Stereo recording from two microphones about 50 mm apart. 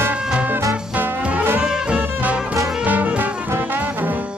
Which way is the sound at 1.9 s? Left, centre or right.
Right.